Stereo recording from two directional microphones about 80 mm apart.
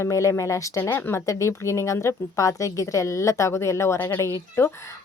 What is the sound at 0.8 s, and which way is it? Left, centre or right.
Speech, left.